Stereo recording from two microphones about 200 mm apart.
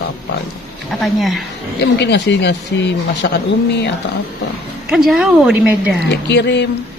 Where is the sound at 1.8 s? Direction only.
60° left (ahead or behind).